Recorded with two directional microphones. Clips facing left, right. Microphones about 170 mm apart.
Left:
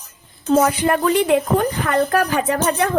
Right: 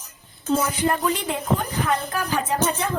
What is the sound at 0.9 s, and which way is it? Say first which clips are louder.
Speech: left 7 dB; 65° left (ahead or behind).